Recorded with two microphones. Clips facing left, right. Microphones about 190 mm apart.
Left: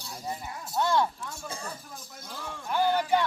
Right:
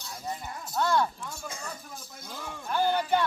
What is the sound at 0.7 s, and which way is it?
Speech, 25° left (ahead or behind).